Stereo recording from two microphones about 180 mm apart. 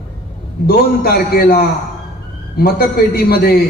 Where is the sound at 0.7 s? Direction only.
60° left (ahead or behind).